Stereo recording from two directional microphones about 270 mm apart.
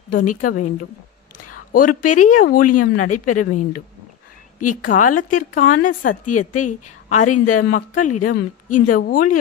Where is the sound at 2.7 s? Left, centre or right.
Left.